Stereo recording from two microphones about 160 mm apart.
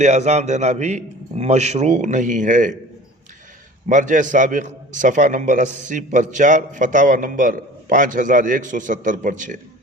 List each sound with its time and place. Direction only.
0.0 s a man's voice: 45° right (ahead or behind)
3.8 s a man's voice: 50° right (ahead or behind)